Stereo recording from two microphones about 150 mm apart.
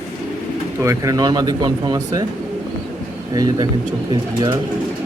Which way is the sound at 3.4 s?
25° right (ahead or behind).